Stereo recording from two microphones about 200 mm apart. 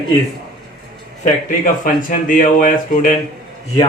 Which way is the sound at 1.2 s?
40° left (ahead or behind).